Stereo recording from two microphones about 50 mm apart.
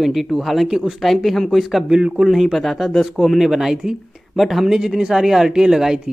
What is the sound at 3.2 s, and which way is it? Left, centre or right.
Speech, centre.